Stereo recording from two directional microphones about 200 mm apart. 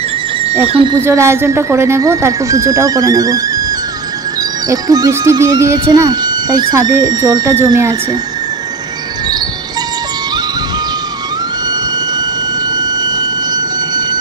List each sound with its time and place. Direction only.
0.7 s speech: 25° right (ahead or behind)
1.0 s speech: 15° right (ahead or behind)
12.7 s a sound: 20° right (ahead or behind)